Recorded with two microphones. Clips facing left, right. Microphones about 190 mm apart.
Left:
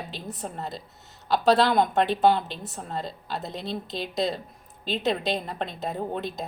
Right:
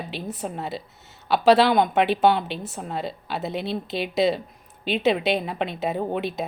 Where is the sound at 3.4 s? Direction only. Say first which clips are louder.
Right 7 dB; 65° right (ahead or behind).